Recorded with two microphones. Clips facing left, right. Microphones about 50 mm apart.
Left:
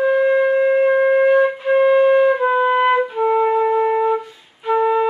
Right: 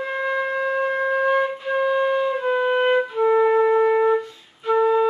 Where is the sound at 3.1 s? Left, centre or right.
Left.